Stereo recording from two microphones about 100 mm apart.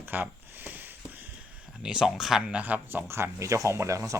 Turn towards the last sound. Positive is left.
turn(degrees=-30)  # may be behind; listen again after turning